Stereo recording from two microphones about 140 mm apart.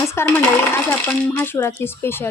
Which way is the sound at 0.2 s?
15° left (ahead or behind).